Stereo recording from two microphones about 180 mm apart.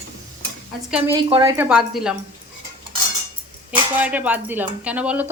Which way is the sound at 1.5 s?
10° right (ahead or behind).